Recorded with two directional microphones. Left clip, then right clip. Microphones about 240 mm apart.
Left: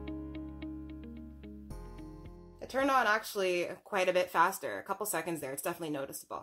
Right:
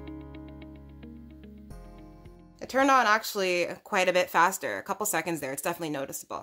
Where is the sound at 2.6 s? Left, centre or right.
Right.